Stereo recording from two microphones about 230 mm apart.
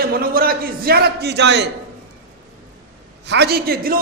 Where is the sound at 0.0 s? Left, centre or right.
Right.